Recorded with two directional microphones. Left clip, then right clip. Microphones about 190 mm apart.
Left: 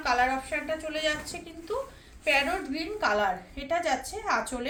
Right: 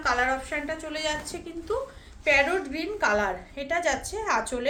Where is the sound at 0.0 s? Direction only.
45° right (ahead or behind).